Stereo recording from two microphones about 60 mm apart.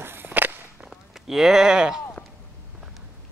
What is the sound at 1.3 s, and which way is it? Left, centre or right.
Speech, centre.